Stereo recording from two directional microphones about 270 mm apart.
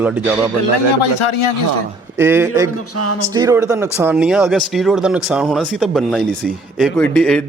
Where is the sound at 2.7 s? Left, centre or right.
Left.